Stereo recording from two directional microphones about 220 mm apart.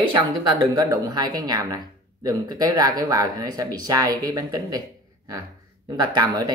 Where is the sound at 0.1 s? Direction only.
20° right (ahead or behind).